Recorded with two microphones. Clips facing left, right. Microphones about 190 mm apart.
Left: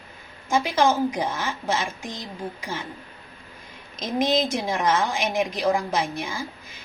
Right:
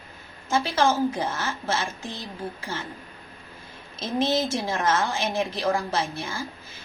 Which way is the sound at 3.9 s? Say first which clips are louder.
Left 2 dB; 15° left (ahead or behind).